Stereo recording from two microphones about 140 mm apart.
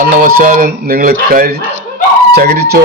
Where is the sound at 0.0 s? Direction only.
90° right.